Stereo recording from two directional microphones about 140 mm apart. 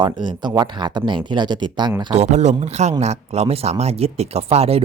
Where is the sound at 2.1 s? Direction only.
55° right (ahead or behind).